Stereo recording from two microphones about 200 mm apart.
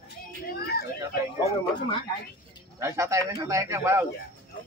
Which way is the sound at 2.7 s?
15° right (ahead or behind).